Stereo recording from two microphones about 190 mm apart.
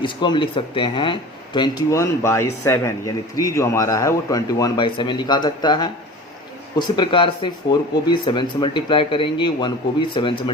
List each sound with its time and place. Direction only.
0.0 s speech: 25° left (ahead or behind)